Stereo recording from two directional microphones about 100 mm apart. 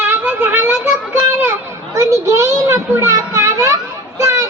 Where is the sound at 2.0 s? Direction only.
30° right (ahead or behind).